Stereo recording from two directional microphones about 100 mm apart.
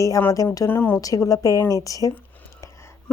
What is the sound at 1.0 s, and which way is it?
Speech, 35° left (ahead or behind).